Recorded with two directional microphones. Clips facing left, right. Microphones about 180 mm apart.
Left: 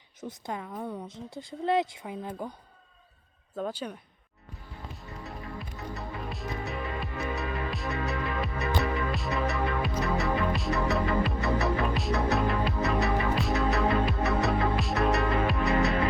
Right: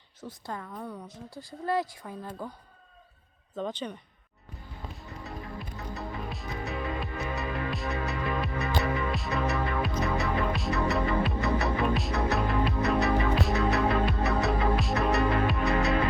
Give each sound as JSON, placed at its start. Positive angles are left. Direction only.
{"t": 0.2, "sound": "a woman's voice", "side_deg": 20}
{"t": 3.6, "sound": "speech", "side_deg": 10}
{"t": 5.2, "sound": "music", "side_deg": 0}